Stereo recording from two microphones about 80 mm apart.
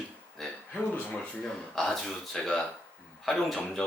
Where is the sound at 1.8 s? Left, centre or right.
Centre.